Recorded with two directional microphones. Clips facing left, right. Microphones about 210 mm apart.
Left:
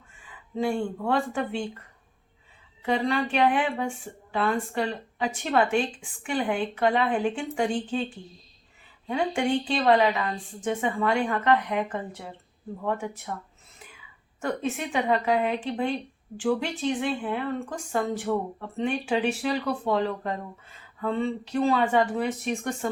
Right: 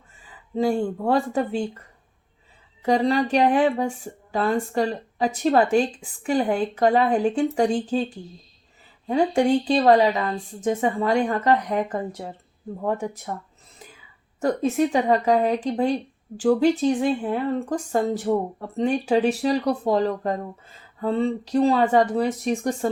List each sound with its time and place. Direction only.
0.3 s speech: 35° right (ahead or behind)
2.8 s speech: 40° right (ahead or behind)
9.0 s speech: 40° right (ahead or behind)
14.4 s speech: 40° right (ahead or behind)